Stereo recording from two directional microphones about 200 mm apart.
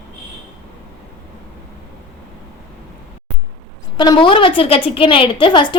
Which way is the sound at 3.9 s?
20° left (ahead or behind).